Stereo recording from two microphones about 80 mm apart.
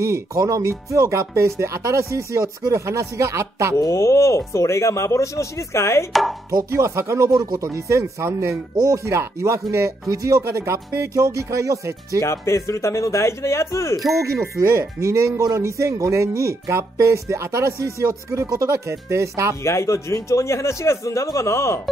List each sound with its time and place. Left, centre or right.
0.0 s speech: right
3.7 s speech: left
6.7 s speech: right
12.2 s speech: left
14.2 s speech: right
19.6 s speech: left